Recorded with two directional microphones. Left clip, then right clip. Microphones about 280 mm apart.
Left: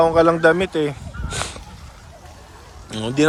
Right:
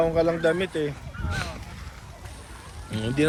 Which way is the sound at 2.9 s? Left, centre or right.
Centre.